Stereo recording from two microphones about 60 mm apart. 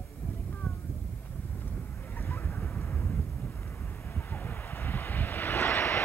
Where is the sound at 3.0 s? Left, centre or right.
Left.